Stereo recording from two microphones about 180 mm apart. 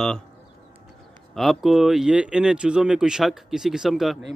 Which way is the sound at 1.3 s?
Centre (ahead or behind).